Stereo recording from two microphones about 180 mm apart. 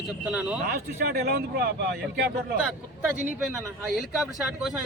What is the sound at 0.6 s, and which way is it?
Speech, 60° right (ahead or behind).